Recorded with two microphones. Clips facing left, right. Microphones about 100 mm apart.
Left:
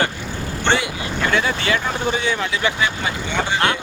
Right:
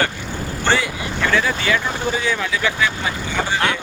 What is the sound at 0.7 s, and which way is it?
Vehicle, 20° left (ahead or behind).